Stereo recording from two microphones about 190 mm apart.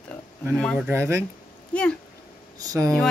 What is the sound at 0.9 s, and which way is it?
Speech, 15° right (ahead or behind).